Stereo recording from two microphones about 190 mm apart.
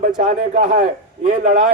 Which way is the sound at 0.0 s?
45° right (ahead or behind).